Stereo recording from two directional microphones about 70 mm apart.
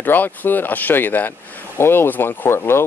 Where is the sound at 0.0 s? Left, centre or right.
Left.